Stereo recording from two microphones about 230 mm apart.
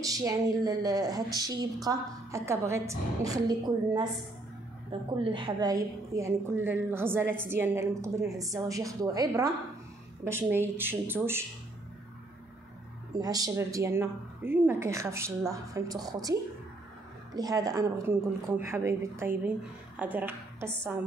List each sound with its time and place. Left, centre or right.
0.0 s a woman's voice: centre
5.1 s a woman's voice: right
13.1 s a woman's voice: centre